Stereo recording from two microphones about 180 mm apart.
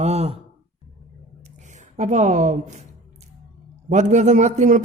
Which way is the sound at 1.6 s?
40° right (ahead or behind).